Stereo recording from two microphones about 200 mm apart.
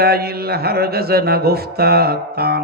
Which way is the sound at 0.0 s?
50° right (ahead or behind).